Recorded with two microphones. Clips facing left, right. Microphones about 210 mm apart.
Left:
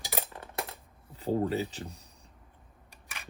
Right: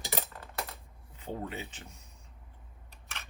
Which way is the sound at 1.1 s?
35° left (ahead or behind).